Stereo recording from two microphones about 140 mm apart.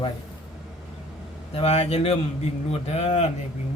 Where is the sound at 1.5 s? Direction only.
45° left (ahead or behind).